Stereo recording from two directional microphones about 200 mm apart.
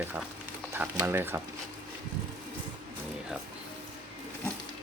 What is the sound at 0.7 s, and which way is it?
Speech, 10° right (ahead or behind).